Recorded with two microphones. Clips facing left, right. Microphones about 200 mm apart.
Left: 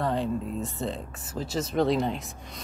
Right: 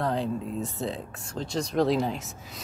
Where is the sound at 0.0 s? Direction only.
Centre (ahead or behind).